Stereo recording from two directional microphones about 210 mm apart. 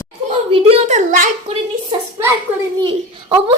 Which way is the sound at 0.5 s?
30° right (ahead or behind).